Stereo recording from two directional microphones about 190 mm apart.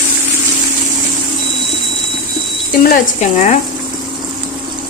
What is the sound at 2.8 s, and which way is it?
Speech, 45° left (ahead or behind).